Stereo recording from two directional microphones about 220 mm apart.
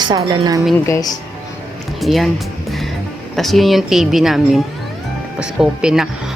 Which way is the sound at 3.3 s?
Centre (ahead or behind).